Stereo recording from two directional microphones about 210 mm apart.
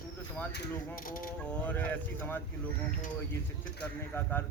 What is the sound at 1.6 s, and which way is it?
Speech, 10° left (ahead or behind).